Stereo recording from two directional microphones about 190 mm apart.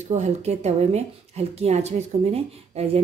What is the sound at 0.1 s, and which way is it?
A woman's voice, 35° right (ahead or behind).